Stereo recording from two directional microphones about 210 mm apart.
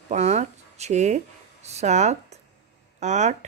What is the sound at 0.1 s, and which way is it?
Speech, 30° right (ahead or behind).